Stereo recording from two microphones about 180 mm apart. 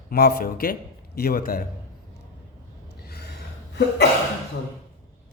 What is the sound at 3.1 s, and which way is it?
Gasp, 65° left (ahead or behind).